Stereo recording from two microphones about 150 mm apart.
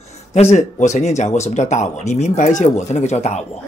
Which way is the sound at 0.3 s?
50° left (ahead or behind).